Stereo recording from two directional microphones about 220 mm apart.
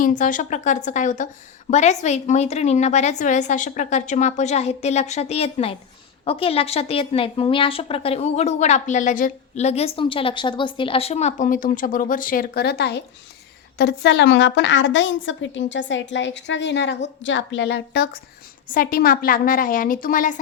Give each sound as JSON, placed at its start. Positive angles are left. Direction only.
{"t": 0.0, "sound": "a woman's voice", "side_deg": 35}